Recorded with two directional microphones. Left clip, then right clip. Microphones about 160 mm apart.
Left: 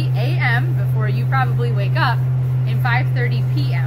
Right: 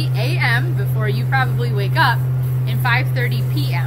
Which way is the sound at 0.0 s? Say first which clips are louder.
Right 1 dB; 5° left (ahead or behind).